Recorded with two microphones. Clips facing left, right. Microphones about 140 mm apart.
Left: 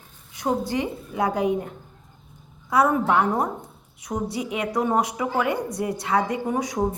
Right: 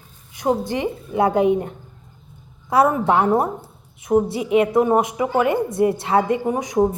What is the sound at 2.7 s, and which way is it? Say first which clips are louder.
A woman's voice: right 3 dB; 30° right (ahead or behind).